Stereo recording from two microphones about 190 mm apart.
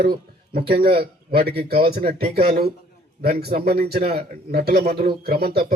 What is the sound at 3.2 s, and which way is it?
A man's voice, 55° right (ahead or behind).